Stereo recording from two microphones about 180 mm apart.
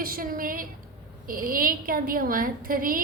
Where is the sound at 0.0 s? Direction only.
50° right (ahead or behind).